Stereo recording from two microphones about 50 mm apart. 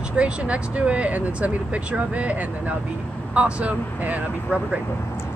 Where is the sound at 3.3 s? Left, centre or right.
Right.